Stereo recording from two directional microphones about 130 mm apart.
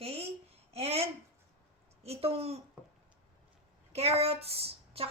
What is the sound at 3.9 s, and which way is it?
A woman's voice, 50° right (ahead or behind).